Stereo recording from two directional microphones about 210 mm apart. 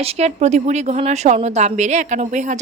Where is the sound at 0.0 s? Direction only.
30° right (ahead or behind).